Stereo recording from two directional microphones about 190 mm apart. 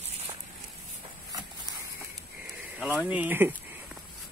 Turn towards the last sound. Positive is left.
turn(degrees=-10)  # may be behind; listen again after turning